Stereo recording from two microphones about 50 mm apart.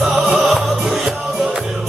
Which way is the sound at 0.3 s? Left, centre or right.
Centre.